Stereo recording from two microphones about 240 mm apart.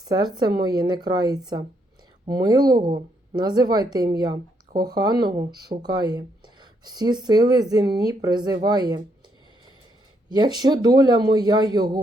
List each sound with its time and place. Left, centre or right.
0.0 s speech: centre
10.2 s speech: centre